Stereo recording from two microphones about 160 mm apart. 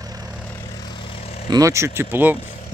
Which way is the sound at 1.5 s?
20° right (ahead or behind).